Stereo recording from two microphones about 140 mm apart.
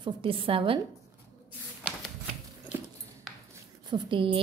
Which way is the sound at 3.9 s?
35° right (ahead or behind).